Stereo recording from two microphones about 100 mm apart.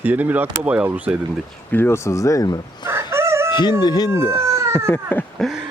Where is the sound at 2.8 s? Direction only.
25° right (ahead or behind).